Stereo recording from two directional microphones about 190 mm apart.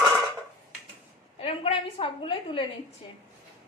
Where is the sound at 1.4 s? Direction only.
30° left (ahead or behind).